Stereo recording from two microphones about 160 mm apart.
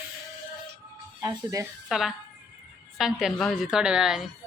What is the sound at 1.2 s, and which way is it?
Speech, 20° right (ahead or behind).